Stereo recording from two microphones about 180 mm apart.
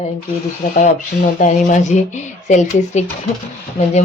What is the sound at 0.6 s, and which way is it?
Speech, 45° left (ahead or behind).